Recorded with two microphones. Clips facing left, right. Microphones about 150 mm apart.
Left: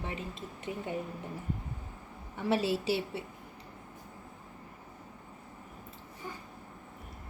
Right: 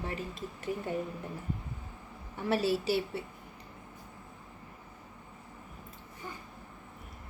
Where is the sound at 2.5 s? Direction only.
25° left (ahead or behind).